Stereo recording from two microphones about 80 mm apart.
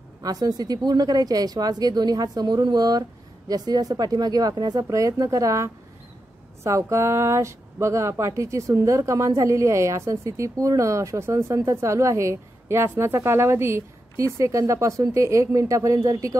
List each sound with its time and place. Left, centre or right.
0.2 s speech: right